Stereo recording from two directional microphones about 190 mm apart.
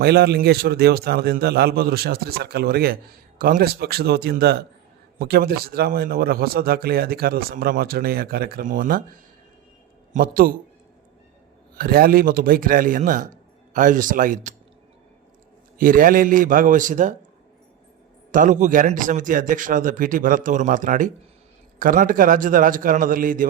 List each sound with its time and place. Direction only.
0.0 s a man's voice: 60° right (ahead or behind)
10.1 s a man's voice: 50° right (ahead or behind)
11.8 s speech: 50° right (ahead or behind)
15.8 s speech: 50° right (ahead or behind)
18.3 s speech: 45° right (ahead or behind)